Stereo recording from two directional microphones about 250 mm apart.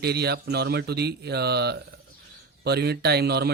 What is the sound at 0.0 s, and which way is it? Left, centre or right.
Speech, right.